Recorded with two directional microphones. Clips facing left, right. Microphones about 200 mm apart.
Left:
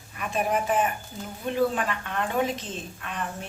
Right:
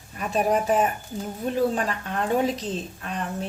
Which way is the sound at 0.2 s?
40° right (ahead or behind).